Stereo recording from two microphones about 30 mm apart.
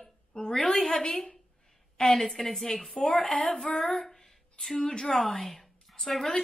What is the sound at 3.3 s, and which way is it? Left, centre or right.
Speech, left.